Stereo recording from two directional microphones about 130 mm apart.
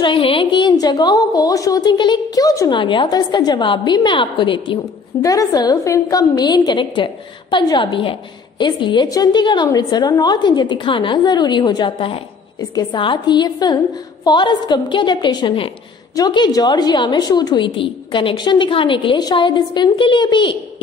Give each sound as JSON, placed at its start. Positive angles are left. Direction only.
{"t": 0.0, "sound": "a woman's voice", "side_deg": 40}
{"t": 2.7, "sound": "a woman's voice", "side_deg": 35}
{"t": 5.2, "sound": "a woman's voice", "side_deg": 25}